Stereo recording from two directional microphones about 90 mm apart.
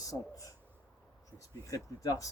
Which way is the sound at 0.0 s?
40° left (ahead or behind).